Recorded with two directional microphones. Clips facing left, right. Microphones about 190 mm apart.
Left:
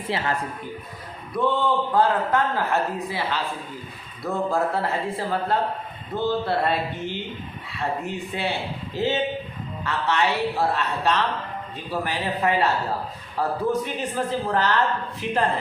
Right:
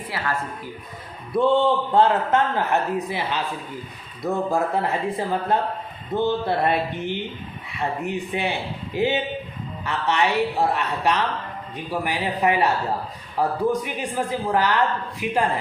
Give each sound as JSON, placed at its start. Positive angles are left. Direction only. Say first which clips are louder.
{"t": 1.3, "sound": "a man's voice", "louder": "right 4 dB", "side_deg": -25}
{"t": 8.0, "sound": "speech", "louder": "right 2 dB", "side_deg": -15}